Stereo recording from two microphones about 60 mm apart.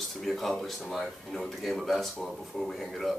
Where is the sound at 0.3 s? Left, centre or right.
Centre.